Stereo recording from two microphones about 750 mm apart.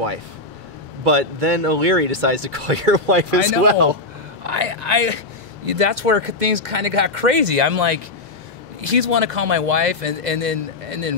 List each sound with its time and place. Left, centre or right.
1.0 s speech: right
4.4 s speech: right